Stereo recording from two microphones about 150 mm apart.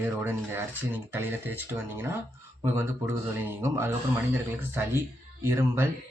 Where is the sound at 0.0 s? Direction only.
15° right (ahead or behind).